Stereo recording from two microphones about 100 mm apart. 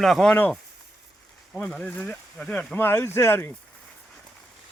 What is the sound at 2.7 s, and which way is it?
Speech, 20° left (ahead or behind).